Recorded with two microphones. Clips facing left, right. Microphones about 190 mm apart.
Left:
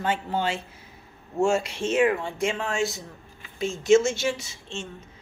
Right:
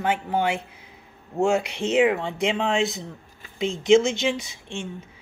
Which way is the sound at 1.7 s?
15° right (ahead or behind).